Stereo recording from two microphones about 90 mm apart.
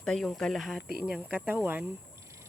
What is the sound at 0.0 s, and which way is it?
Speech, 5° left (ahead or behind).